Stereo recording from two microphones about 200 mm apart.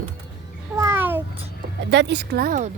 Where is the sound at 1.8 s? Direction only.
60° right (ahead or behind); by 2.7 s 45° right (ahead or behind).